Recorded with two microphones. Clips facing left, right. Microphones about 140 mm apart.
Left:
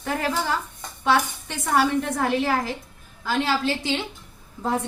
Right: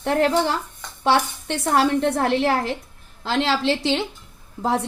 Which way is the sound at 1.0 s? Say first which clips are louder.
Right 2 dB; 30° right (ahead or behind).